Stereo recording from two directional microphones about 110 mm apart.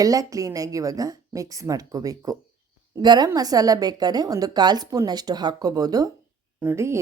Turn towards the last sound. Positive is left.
turn(degrees=-25)  # may be behind; listen again after turning